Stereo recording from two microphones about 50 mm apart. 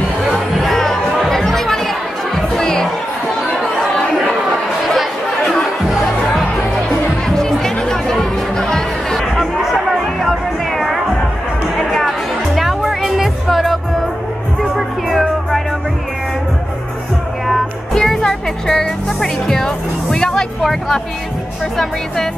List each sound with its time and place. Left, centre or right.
0.3 s music: centre
4.8 s chatter: centre
5.9 s music: centre
7.2 s music: centre
17.9 s music: centre